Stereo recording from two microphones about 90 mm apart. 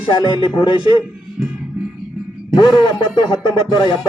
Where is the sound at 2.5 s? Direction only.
50° left (ahead or behind).